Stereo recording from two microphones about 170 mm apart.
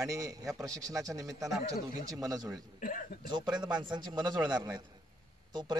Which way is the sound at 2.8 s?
55° left (ahead or behind).